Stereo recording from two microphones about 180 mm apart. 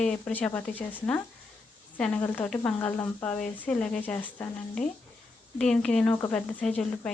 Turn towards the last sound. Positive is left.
turn(degrees=5)  # may be behind; listen again after turning